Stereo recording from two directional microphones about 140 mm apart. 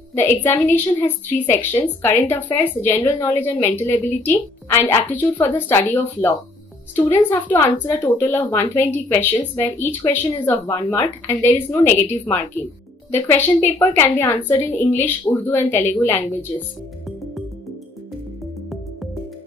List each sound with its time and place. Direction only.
0.1 s speech: 15° left (ahead or behind)